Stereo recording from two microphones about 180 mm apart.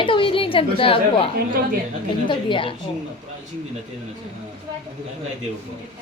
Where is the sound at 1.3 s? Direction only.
55° right (ahead or behind).